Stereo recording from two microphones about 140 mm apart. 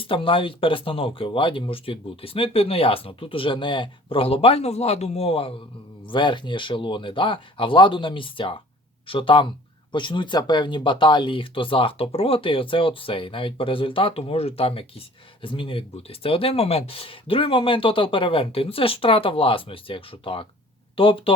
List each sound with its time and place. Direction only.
0.0 s speech: 40° left (ahead or behind)